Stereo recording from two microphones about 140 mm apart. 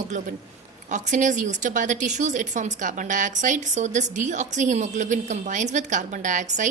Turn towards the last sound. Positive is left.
turn(degrees=-60)  # may be behind; listen again after turning